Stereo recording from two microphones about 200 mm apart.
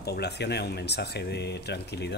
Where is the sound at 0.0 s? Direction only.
55° left (ahead or behind).